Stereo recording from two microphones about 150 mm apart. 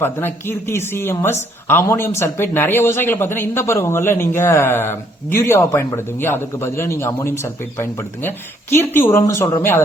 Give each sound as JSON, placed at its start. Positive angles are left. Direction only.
{"t": 0.0, "sound": "speech", "side_deg": 15}